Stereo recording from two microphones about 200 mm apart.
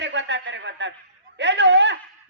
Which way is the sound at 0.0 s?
65° right (ahead or behind).